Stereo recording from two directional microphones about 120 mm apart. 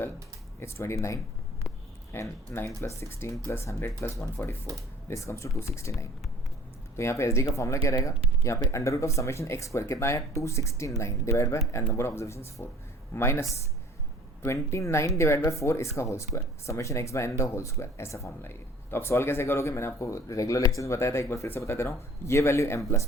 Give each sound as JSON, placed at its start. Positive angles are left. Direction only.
{"t": 0.6, "sound": "speech", "side_deg": 25}
{"t": 14.4, "sound": "speech", "side_deg": 25}